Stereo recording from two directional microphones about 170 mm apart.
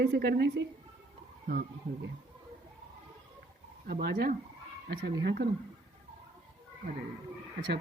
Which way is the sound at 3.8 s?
65° right (ahead or behind).